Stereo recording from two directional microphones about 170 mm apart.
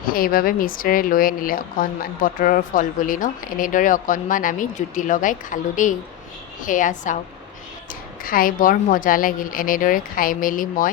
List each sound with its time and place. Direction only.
0.0 s speech: 60° left (ahead or behind)
8.2 s speech: 55° left (ahead or behind)